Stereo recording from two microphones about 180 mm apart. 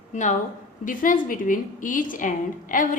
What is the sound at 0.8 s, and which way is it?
A woman's voice, 50° left (ahead or behind).